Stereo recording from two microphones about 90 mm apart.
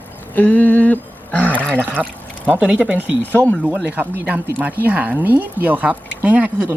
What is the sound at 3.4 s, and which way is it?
Speech, 40° right (ahead or behind).